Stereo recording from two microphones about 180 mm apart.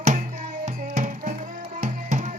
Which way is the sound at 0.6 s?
45° right (ahead or behind).